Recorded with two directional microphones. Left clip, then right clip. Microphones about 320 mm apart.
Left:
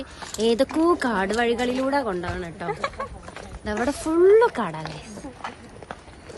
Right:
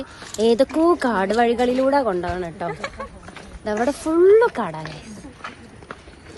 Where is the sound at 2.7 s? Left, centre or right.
Centre.